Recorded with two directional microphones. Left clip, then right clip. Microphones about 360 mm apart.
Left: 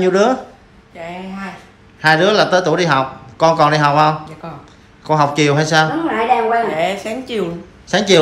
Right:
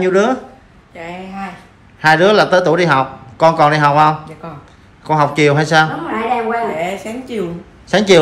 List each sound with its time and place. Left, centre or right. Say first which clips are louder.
0.0 s speech: even; centre
6.3 s a sound: left 3 dB; left
6.7 s a woman's voice: left 2 dB; centre